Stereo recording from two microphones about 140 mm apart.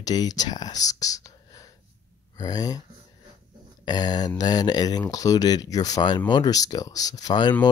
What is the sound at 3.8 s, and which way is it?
A man's voice, 30° left (ahead or behind).